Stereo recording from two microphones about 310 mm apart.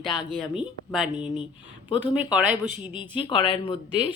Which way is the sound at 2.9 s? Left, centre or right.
Centre.